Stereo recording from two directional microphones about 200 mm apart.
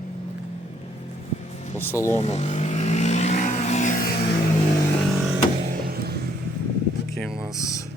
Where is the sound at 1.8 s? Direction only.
10° left (ahead or behind).